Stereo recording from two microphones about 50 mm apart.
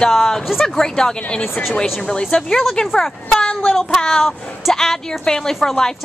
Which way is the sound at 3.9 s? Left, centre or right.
Centre.